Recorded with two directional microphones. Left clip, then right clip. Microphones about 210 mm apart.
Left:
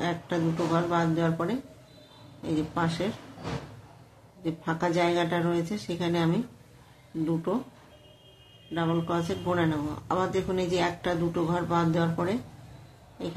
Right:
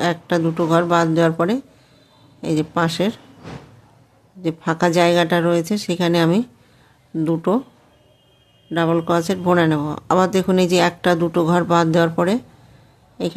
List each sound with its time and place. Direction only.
0.0 s speech: 55° right (ahead or behind)
4.4 s speech: 55° right (ahead or behind)
8.7 s speech: 55° right (ahead or behind)